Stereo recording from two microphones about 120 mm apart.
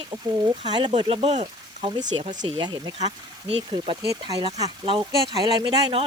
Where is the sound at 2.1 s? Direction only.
90° right.